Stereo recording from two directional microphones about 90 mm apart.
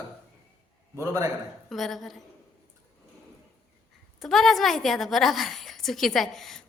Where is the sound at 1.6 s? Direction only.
Centre (ahead or behind).